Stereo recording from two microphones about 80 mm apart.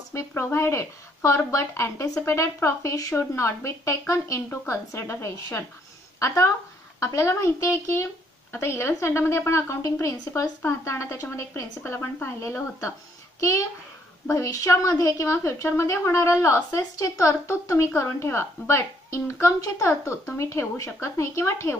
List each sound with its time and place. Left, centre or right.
0.1 s a woman's voice: left